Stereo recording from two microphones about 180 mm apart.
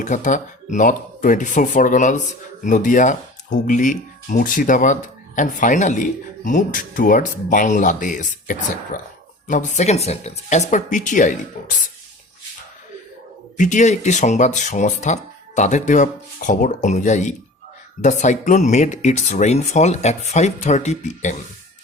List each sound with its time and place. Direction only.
0.0 s speech: 45° left (ahead or behind)
13.6 s speech: 45° left (ahead or behind)